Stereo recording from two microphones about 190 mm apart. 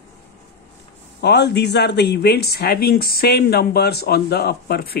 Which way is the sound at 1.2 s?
60° left (ahead or behind).